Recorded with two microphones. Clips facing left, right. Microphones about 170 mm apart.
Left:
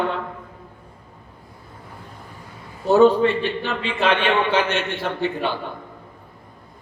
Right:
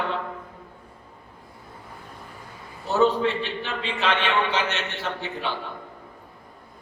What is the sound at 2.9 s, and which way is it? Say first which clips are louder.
A man's voice: left 7 dB; 55° left (ahead or behind).